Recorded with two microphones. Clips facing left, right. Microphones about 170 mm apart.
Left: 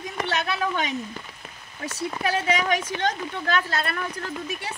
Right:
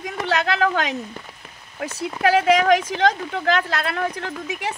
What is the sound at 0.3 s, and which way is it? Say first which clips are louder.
Speech: right 7 dB; 90° right.